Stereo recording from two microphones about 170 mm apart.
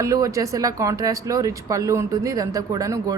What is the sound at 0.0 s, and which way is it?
Speech, 20° right (ahead or behind).